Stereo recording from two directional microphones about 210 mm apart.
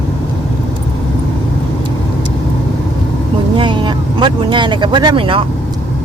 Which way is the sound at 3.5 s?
25° right (ahead or behind).